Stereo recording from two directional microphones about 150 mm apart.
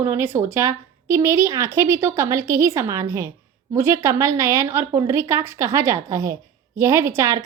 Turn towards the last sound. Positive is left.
turn(degrees=-20)  # may be behind; listen again after turning